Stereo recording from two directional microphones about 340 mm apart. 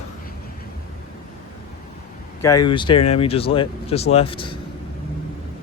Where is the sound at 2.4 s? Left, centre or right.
Centre.